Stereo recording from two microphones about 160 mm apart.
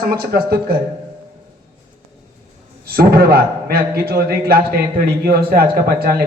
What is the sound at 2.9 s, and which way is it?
Speech, 70° right (ahead or behind).